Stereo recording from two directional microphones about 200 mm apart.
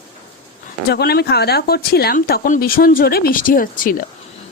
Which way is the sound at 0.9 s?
55° left (ahead or behind).